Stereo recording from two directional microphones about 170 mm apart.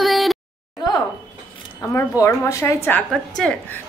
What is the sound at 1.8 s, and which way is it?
A woman's voice, 15° left (ahead or behind).